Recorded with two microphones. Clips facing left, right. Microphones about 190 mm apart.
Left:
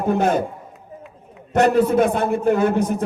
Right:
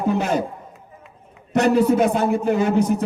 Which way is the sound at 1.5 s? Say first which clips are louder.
Left 1 dB; 55° left (ahead or behind).